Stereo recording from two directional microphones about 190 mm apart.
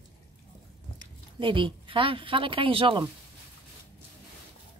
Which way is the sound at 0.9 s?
25° right (ahead or behind).